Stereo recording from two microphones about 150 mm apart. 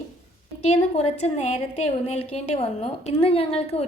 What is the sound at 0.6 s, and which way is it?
A woman's voice, 45° left (ahead or behind).